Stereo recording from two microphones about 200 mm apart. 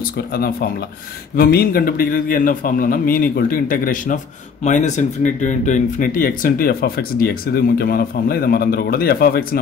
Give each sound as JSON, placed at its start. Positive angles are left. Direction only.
{"t": 0.3, "sound": "speech", "side_deg": 45}